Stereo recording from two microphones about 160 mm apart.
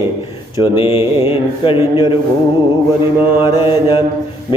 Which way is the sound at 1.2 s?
35° left (ahead or behind).